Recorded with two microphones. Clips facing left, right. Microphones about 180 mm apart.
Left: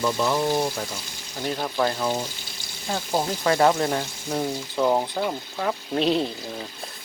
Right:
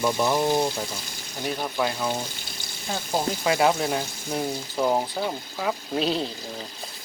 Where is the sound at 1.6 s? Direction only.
Centre (ahead or behind).